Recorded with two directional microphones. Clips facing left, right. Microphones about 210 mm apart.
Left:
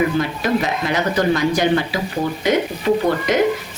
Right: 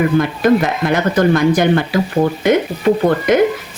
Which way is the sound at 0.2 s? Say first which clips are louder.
Right 6 dB; 50° right (ahead or behind).